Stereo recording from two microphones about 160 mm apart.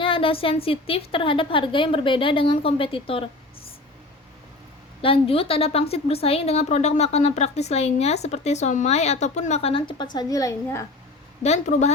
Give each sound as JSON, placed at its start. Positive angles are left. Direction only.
{"t": 0.0, "sound": "a woman's voice", "side_deg": 35}
{"t": 5.0, "sound": "a woman's voice", "side_deg": 35}
{"t": 11.4, "sound": "a woman's voice", "side_deg": 45}